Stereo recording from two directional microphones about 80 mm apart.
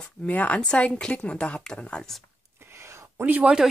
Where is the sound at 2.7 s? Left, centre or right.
Right.